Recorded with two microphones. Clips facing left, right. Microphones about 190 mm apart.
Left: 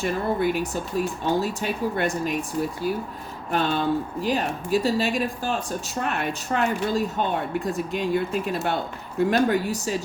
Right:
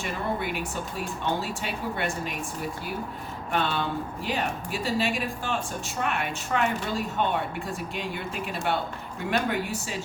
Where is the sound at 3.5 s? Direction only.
40° left (ahead or behind).